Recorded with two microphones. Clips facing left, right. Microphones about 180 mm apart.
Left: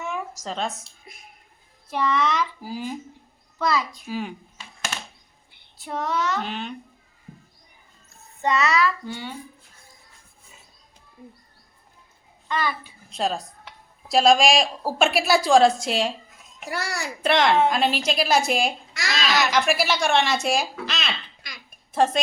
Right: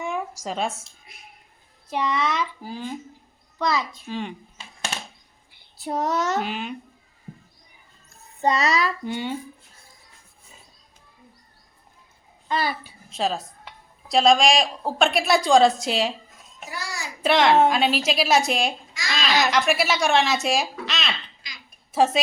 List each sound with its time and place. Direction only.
0.0 s a sound: 10° right (ahead or behind)
1.9 s a child's voice: 15° right (ahead or behind)
2.6 s speech: 5° left (ahead or behind)
3.6 s a child's voice: 20° right (ahead or behind)
4.0 s speech: 5° left (ahead or behind)
5.8 s child singing: 40° right (ahead or behind)
6.4 s a child's voice: 5° right (ahead or behind)
8.4 s a child's voice: 35° right (ahead or behind)
9.0 s a child's voice: 15° right (ahead or behind)
12.5 s a child's voice: 35° right (ahead or behind)
13.1 s a woman's voice: centre (ahead or behind)
16.6 s a child's voice: 70° left (ahead or behind)
17.2 s speech: centre (ahead or behind)